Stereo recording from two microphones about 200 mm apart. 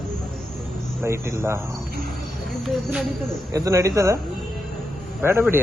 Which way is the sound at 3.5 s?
15° right (ahead or behind).